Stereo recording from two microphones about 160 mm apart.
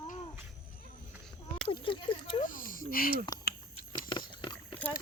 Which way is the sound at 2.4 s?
60° left (ahead or behind).